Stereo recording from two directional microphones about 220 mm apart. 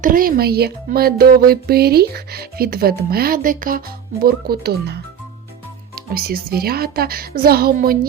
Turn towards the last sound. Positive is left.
turn(degrees=-45)  # may be behind; listen again after turning